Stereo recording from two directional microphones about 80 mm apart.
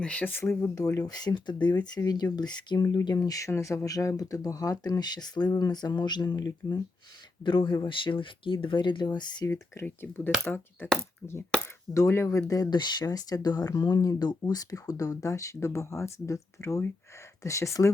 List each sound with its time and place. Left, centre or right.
0.0 s speech: centre
0.8 s speech: left
1.1 s speech: left
6.3 s speech: left
7.4 s speech: left
9.8 s speech: left
11.9 s speech: left
12.7 s speech: left